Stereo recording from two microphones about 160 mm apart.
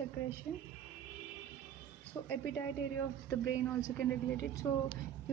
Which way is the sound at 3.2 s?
20° left (ahead or behind).